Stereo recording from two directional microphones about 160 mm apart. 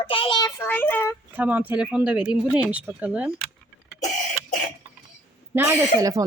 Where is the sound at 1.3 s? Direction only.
10° right (ahead or behind).